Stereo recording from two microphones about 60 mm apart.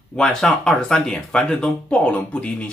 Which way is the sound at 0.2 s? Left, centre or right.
Centre.